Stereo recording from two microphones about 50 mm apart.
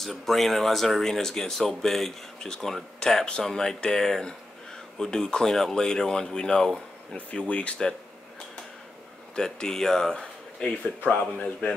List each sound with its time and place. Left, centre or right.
0.0 s speech: centre
7.2 s speech: left
9.3 s speech: centre
11.1 s speech: left